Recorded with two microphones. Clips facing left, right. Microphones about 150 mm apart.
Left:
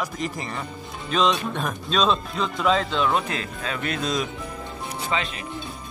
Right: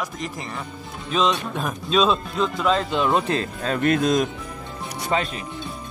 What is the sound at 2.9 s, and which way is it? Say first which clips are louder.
Speech: right 3 dB; 20° right (ahead or behind).